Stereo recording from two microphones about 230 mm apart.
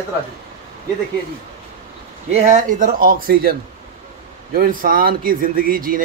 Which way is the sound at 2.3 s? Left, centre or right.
Right.